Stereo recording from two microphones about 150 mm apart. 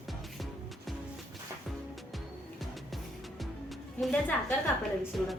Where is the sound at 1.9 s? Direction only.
Centre (ahead or behind).